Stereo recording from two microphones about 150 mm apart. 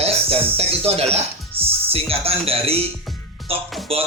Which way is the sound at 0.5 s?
40° right (ahead or behind).